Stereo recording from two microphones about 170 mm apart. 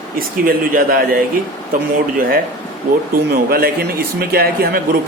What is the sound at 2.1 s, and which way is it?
A man's voice, 60° right (ahead or behind).